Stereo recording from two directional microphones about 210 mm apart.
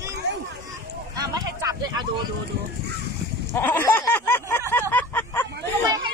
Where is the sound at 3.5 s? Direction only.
10° left (ahead or behind).